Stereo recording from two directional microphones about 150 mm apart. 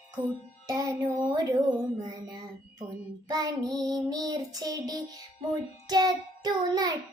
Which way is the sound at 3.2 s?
25° right (ahead or behind).